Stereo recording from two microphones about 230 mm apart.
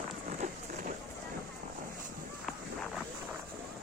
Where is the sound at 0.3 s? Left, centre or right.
Right.